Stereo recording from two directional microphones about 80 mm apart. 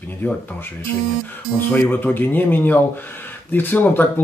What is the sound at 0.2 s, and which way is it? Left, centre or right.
Speech, centre.